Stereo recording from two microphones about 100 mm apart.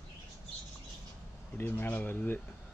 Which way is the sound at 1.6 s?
20° left (ahead or behind).